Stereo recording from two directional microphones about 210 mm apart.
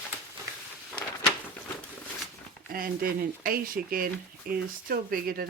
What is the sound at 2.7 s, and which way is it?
Speech, 45° right (ahead or behind).